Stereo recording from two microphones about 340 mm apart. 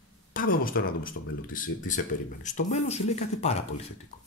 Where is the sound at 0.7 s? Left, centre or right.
Left.